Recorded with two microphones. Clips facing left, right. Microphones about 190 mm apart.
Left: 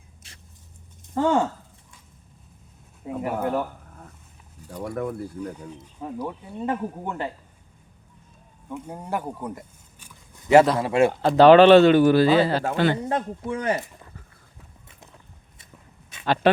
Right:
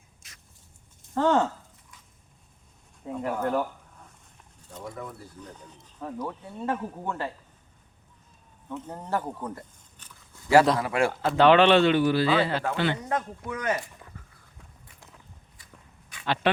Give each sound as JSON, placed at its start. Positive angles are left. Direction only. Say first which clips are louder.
{"t": 0.2, "sound": "vehicle", "louder": "left 4 dB", "side_deg": 30}
{"t": 1.1, "sound": "speech", "louder": "left 1 dB", "side_deg": 10}
{"t": 3.0, "sound": "speech", "louder": "left 3 dB", "side_deg": 10}
{"t": 4.8, "sound": "speech", "louder": "left 9 dB", "side_deg": 65}
{"t": 5.4, "sound": "speech", "louder": "left 11 dB", "side_deg": 10}
{"t": 8.7, "sound": "a sound", "louder": "left 1 dB", "side_deg": 10}
{"t": 10.8, "sound": "speech", "louder": "left 6 dB", "side_deg": 25}
{"t": 13.0, "sound": "speech", "louder": "left 4 dB", "side_deg": 30}
{"t": 15.5, "sound": "walk", "louder": "left 6 dB", "side_deg": 25}
{"t": 16.2, "sound": "speech", "louder": "left 6 dB", "side_deg": 45}